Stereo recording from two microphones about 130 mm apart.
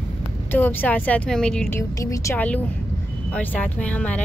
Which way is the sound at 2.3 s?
10° left (ahead or behind).